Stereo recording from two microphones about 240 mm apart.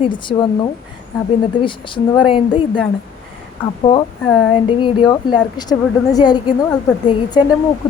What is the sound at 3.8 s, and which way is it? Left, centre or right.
A woman's voice, left.